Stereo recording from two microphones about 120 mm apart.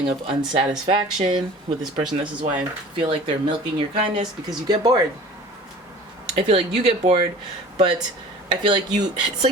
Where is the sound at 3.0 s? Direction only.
45° right (ahead or behind).